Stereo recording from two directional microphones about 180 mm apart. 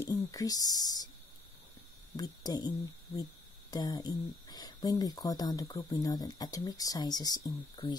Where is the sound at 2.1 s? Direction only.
20° left (ahead or behind).